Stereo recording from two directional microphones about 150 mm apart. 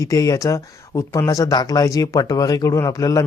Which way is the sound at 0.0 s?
20° left (ahead or behind).